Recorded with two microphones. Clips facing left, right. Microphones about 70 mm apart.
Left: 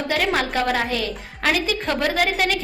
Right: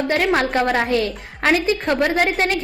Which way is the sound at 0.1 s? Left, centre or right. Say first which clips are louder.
Right 2 dB; right.